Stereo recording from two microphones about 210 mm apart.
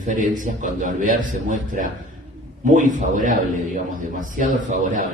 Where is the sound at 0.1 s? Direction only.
40° right (ahead or behind).